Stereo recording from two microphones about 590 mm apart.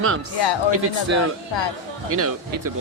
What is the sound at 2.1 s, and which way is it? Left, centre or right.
Speech, right.